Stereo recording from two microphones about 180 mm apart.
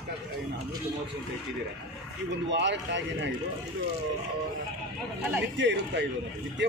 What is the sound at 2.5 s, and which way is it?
Speech, 80° right.